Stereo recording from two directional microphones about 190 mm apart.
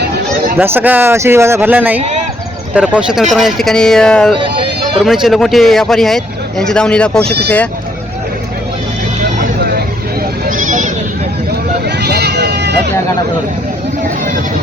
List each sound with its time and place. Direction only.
0.6 s speech: 10° right (ahead or behind)
4.4 s a sound: 25° right (ahead or behind)
4.9 s speech: centre (ahead or behind)
9.4 s vehicle: 55° right (ahead or behind)
10.4 s goat: 45° right (ahead or behind)
11.9 s a sound: 60° right (ahead or behind)